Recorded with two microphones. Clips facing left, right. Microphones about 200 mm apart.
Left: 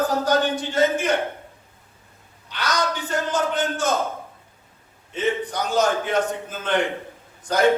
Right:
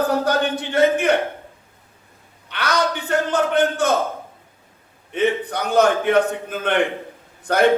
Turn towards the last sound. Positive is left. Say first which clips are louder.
# right 3 dB
turn(degrees=-60)  # may be behind; listen again after turning